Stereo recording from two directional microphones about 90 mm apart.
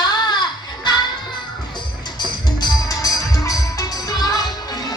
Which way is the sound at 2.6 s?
45° left (ahead or behind).